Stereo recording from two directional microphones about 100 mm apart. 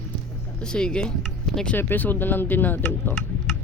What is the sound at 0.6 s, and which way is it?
Speech, 10° left (ahead or behind).